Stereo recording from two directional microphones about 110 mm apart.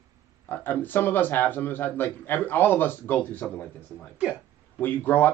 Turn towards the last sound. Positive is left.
turn(degrees=20)  # may be behind; listen again after turning